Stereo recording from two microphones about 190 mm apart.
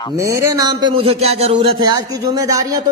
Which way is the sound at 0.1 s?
15° right (ahead or behind).